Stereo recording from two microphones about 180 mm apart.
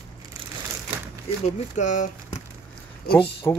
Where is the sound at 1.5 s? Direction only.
40° left (ahead or behind).